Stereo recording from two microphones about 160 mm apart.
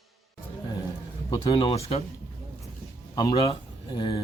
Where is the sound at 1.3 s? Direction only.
25° left (ahead or behind).